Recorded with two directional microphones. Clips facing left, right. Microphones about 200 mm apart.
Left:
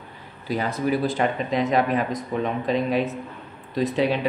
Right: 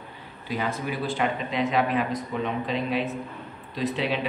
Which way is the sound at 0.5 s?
40° left (ahead or behind).